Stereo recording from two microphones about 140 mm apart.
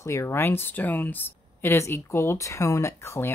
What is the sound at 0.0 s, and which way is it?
Speech, 20° left (ahead or behind).